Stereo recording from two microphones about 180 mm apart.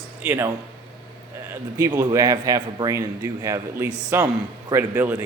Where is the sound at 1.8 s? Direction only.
20° right (ahead or behind).